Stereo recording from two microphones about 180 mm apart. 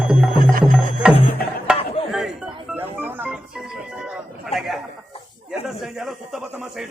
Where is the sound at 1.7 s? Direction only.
5° right (ahead or behind).